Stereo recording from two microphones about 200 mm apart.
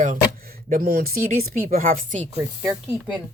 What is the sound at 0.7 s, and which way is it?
Speech, 50° right (ahead or behind).